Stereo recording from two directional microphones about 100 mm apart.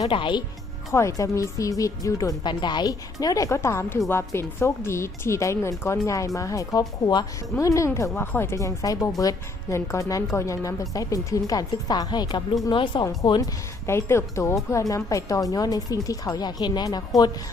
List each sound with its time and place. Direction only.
0.1 s a woman's voice: 55° left (ahead or behind)
0.9 s speech: 30° left (ahead or behind)
2.4 s speech: 50° left (ahead or behind)
13.4 s speech: 25° left (ahead or behind)